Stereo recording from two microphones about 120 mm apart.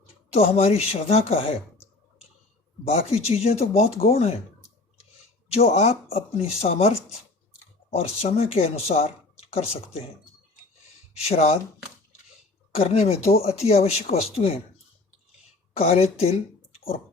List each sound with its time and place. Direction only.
0.0 s speech: 60° left (ahead or behind)
2.8 s speech: 60° left (ahead or behind)
5.5 s speech: 60° left (ahead or behind)
11.2 s speech: 60° left (ahead or behind)
12.7 s speech: 60° left (ahead or behind)
15.7 s speech: 55° left (ahead or behind)
16.7 s a sound: 55° left (ahead or behind)